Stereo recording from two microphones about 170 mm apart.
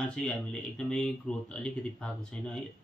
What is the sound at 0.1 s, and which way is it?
Speech, 5° left (ahead or behind).